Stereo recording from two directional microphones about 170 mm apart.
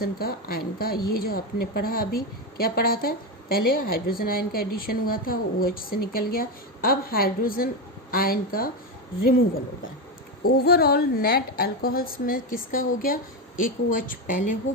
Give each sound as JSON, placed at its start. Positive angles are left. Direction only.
{"t": 0.0, "sound": "a woman's voice", "side_deg": 60}
{"t": 10.6, "sound": "a woman's voice", "side_deg": 65}